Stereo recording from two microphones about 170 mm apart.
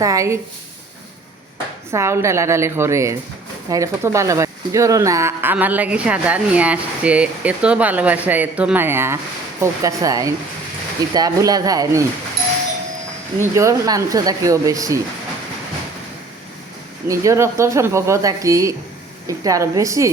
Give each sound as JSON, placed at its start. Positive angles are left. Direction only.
{"t": 0.0, "sound": "speech", "side_deg": -20}
{"t": 1.9, "sound": "speech", "side_deg": -15}
{"t": 13.4, "sound": "speech", "side_deg": -15}
{"t": 17.1, "sound": "speech", "side_deg": -15}